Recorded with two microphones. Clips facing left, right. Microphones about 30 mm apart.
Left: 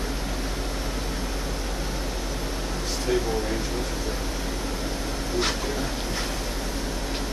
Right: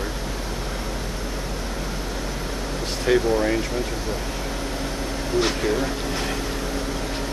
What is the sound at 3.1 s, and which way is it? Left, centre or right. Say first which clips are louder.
Speech: right 6 dB; right.